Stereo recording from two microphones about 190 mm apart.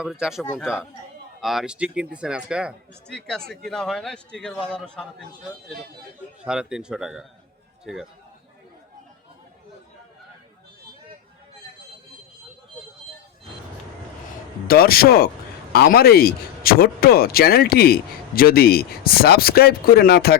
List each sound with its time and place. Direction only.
0.0 s speech: 5° right (ahead or behind)
6.4 s speech: 5° right (ahead or behind)
14.7 s speech: 50° left (ahead or behind)